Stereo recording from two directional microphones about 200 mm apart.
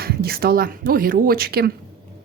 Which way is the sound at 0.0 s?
50° right (ahead or behind).